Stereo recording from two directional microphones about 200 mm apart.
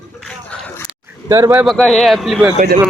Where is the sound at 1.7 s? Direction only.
5° left (ahead or behind).